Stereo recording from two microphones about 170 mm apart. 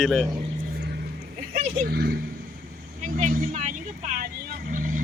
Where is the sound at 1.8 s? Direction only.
65° right (ahead or behind).